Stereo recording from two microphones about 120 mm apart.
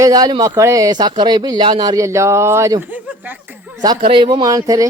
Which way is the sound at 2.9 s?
15° right (ahead or behind).